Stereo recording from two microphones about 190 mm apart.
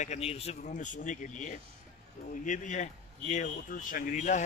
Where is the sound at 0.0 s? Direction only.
35° left (ahead or behind).